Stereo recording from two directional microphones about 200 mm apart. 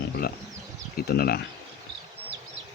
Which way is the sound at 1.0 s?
50° left (ahead or behind).